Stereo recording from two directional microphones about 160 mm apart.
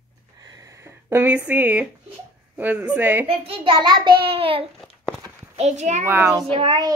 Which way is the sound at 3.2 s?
35° right (ahead or behind).